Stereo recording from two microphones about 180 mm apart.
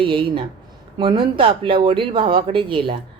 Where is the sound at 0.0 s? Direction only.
25° right (ahead or behind).